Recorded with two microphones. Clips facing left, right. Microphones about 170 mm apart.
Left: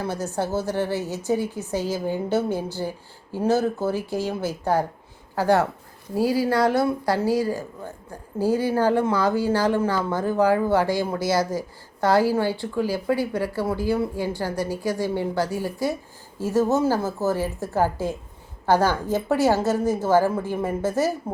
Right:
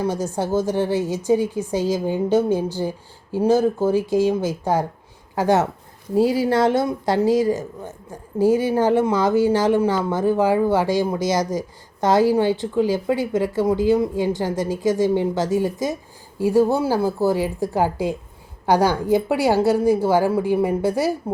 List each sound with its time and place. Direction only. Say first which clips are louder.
0.0 s a woman's voice: right 4 dB; 15° right (ahead or behind)